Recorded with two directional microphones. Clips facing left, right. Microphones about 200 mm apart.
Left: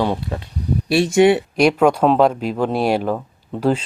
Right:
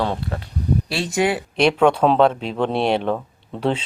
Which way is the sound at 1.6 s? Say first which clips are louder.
Left 2 dB; 5° left (ahead or behind).